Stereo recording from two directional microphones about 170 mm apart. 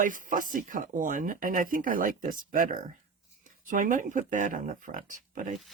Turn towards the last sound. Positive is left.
turn(degrees=-50)  # may be behind; listen again after turning